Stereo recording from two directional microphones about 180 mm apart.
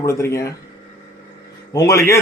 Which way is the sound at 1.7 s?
15° left (ahead or behind).